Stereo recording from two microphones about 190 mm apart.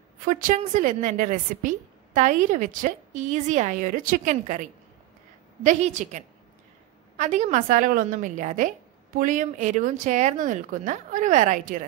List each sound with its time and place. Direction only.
0.2 s a woman's voice: 45° right (ahead or behind)